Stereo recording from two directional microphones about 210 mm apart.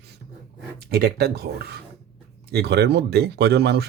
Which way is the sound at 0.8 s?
50° right (ahead or behind).